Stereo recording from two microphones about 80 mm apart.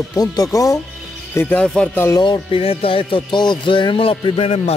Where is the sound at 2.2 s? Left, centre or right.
Left.